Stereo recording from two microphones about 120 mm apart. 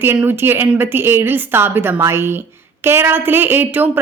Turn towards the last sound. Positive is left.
turn(degrees=-15)  # may be behind; listen again after turning